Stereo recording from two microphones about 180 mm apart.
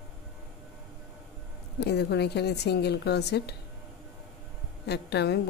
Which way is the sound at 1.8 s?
65° left (ahead or behind).